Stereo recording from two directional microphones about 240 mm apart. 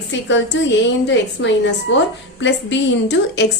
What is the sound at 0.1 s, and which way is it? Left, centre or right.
A woman's voice, left.